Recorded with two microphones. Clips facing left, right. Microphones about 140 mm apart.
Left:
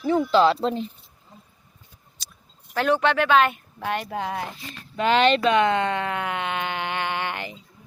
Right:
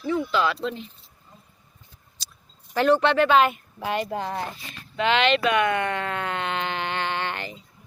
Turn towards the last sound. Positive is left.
turn(degrees=15)  # may be behind; listen again after turning